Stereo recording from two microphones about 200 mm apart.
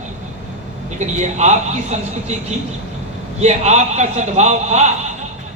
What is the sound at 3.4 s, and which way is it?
A man's voice, 35° right (ahead or behind).